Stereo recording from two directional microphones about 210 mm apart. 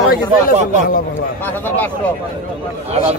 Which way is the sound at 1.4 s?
10° left (ahead or behind).